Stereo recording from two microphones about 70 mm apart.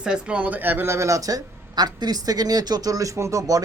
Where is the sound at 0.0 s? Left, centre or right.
Centre; by 0.9 s right.